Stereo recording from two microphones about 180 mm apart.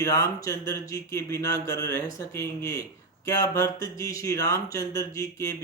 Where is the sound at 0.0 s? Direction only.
20° left (ahead or behind).